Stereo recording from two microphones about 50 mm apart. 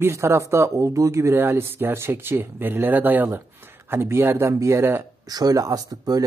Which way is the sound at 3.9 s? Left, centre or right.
Right.